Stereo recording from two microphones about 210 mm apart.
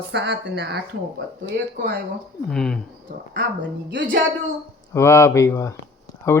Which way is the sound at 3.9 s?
55° right (ahead or behind).